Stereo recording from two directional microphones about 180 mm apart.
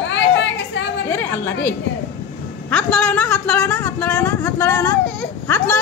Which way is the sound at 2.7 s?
10° left (ahead or behind).